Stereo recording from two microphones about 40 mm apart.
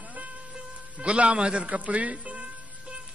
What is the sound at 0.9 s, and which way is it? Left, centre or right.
Speech, right.